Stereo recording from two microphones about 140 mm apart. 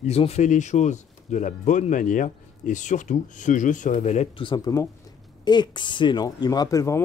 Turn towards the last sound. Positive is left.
turn(degrees=25)  # may be behind; listen again after turning